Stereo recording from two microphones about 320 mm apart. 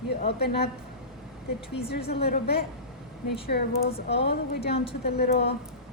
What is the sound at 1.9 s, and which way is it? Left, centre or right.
A woman's voice, left.